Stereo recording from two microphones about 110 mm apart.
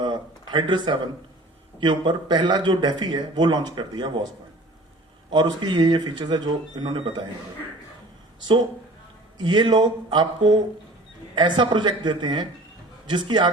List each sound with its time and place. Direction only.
0.0 s a sound: 40° right (ahead or behind)
1.8 s speech: 45° right (ahead or behind)
5.3 s speech: 40° right (ahead or behind)
9.4 s speech: 45° right (ahead or behind)